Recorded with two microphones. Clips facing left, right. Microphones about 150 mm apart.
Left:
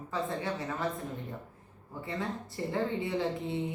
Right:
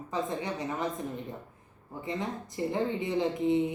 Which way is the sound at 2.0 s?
20° right (ahead or behind).